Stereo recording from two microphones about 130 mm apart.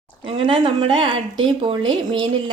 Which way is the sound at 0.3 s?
40° right (ahead or behind).